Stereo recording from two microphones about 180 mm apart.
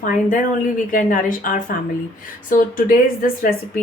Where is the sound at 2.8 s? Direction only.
50° left (ahead or behind).